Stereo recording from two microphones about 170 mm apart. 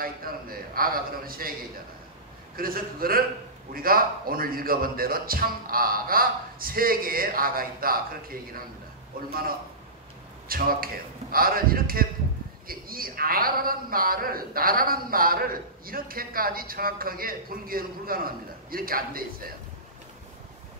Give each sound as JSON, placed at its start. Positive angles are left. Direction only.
{"t": 0.0, "sound": "a man's voice", "side_deg": -60}
{"t": 2.5, "sound": "a man's voice", "side_deg": -60}